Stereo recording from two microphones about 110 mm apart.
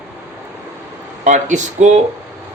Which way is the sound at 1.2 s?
90° right.